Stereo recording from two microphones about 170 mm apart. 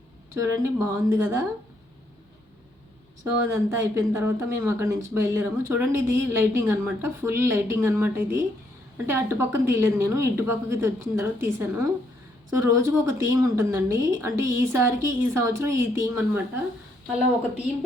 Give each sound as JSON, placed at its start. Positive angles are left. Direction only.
{"t": 0.3, "sound": "speech", "side_deg": -15}
{"t": 3.2, "sound": "speech", "side_deg": -15}